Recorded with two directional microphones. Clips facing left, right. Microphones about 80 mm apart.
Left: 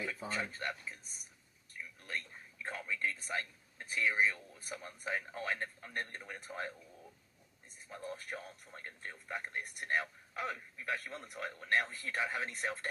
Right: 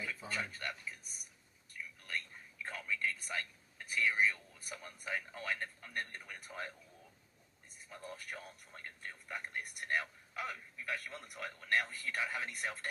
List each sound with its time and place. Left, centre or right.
0.3 s a man's voice: left
7.9 s speech: left